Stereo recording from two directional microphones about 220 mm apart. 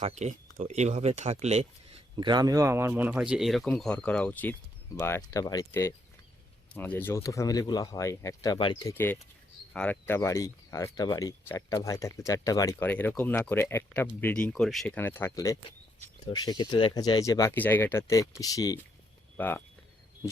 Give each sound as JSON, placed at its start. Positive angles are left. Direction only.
{"t": 0.0, "sound": "speech", "side_deg": -30}